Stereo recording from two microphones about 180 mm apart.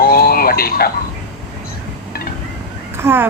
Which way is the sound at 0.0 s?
55° left (ahead or behind).